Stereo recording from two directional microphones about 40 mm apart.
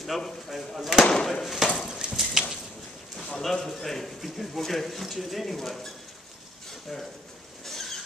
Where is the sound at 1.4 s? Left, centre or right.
Centre.